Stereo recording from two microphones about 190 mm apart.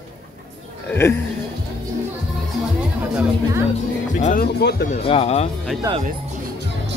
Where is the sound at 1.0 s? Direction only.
15° left (ahead or behind).